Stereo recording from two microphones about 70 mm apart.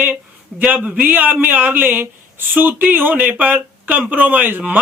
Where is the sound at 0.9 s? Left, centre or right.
Right.